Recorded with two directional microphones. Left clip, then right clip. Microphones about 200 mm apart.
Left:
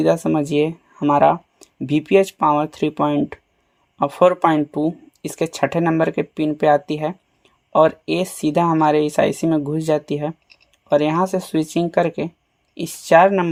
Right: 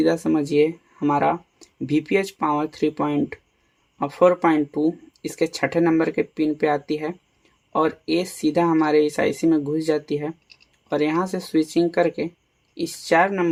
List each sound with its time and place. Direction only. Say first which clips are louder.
0.0 s speech: left 3 dB; 35° left (ahead or behind)